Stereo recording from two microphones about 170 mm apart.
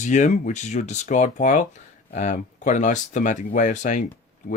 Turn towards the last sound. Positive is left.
turn(degrees=45)  # may be behind; listen again after turning